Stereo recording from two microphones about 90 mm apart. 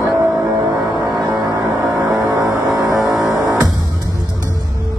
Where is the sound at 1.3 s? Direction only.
50° right (ahead or behind).